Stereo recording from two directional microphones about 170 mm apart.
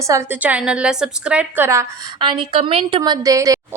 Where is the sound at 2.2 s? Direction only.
30° right (ahead or behind).